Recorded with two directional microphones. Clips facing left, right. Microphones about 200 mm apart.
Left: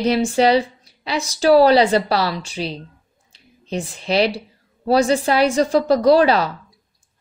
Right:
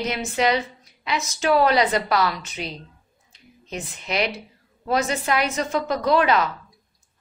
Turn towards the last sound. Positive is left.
turn(degrees=35)  # may be behind; listen again after turning